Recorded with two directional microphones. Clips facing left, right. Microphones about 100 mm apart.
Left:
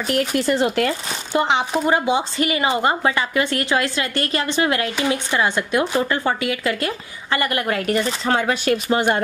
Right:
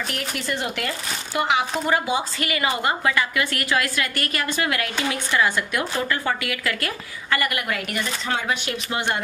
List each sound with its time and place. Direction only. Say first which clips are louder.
0.1 s speech: left 9 dB; 35° left (ahead or behind)